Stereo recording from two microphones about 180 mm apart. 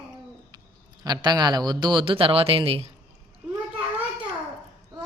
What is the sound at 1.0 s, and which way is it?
A man's voice, 25° right (ahead or behind).